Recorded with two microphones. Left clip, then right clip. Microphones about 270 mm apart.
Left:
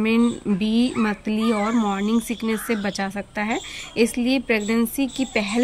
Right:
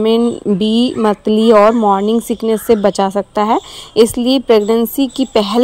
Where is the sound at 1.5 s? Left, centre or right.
Right.